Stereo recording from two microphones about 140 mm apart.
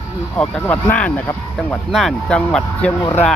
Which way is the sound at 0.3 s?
10° left (ahead or behind).